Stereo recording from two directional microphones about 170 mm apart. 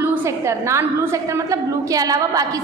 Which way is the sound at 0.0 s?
15° right (ahead or behind).